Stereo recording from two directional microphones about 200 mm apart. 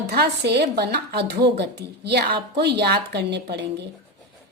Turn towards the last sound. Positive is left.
turn(degrees=-55)  # may be behind; listen again after turning